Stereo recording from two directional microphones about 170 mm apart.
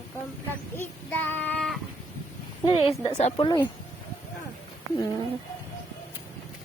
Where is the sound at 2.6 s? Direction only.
30° left (ahead or behind).